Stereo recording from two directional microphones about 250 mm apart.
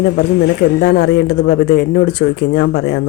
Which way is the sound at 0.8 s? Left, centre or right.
Left.